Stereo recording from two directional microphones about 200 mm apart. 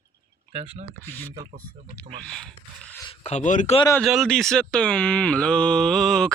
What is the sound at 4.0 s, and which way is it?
Speech, centre (ahead or behind).